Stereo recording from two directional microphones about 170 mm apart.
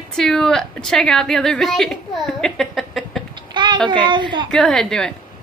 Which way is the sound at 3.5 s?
30° right (ahead or behind).